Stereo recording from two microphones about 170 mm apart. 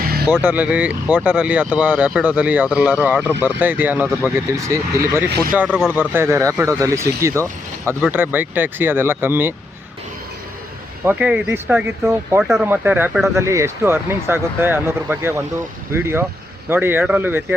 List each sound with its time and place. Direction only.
0.0 s vehicle: 65° right (ahead or behind)
0.3 s speech: 10° right (ahead or behind)
5.6 s speech: 5° left (ahead or behind)
5.9 s speech: 10° right (ahead or behind)
11.0 s speech: 10° right (ahead or behind)
12.4 s speech: centre (ahead or behind)
12.6 s speech: 10° right (ahead or behind)